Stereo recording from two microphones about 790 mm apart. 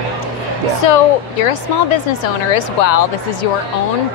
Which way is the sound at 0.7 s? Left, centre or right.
Left.